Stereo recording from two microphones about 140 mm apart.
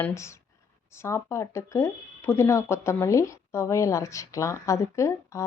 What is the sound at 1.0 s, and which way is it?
Speech, 20° left (ahead or behind).